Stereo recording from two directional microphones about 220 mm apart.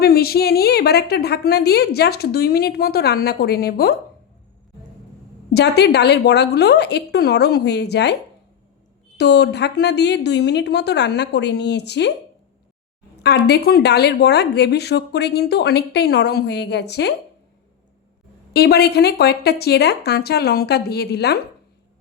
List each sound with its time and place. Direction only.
0.0 s speech: 45° left (ahead or behind)
5.5 s speech: 50° left (ahead or behind)
9.1 s speech: 50° left (ahead or behind)
13.2 s speech: 50° left (ahead or behind)
18.5 s speech: 45° left (ahead or behind)